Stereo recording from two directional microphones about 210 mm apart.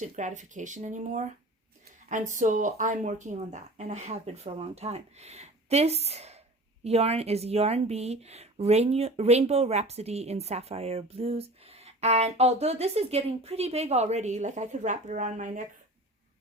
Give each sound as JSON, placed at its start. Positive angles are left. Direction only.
{"t": 0.0, "sound": "speech", "side_deg": -35}
{"t": 2.3, "sound": "speech", "side_deg": -35}